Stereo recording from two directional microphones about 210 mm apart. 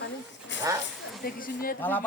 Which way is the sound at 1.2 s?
45° left (ahead or behind).